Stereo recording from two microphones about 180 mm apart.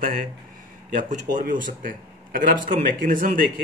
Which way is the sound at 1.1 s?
45° right (ahead or behind).